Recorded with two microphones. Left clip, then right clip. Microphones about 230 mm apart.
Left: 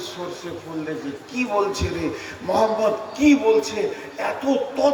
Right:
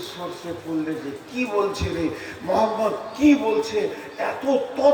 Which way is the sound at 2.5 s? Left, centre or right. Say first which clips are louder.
Left 2 dB; left.